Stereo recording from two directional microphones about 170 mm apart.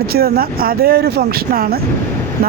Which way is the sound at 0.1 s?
65° right (ahead or behind).